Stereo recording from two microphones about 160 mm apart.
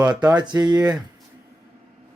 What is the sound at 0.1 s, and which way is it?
Speech, 25° right (ahead or behind).